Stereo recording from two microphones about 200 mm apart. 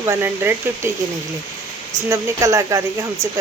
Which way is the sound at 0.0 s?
10° right (ahead or behind).